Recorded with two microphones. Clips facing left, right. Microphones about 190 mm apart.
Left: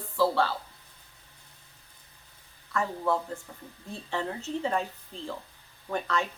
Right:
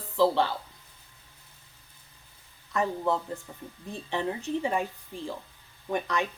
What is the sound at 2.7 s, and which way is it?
Speech, 20° right (ahead or behind).